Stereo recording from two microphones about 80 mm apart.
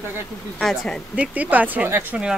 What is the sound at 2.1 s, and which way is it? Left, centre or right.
Speech, centre.